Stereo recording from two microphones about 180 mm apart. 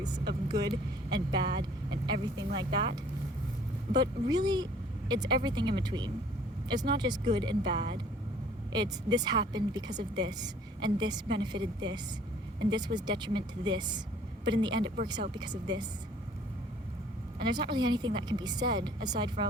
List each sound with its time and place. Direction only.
0.4 s vehicle: 20° right (ahead or behind)
1.1 s a woman's voice: 25° right (ahead or behind)
17.4 s a woman's voice: 25° right (ahead or behind)